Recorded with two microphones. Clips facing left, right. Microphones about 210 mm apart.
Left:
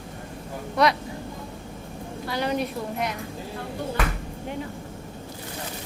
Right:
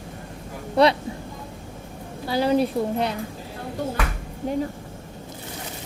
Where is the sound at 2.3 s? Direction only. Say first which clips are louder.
Right 6 dB; 30° right (ahead or behind).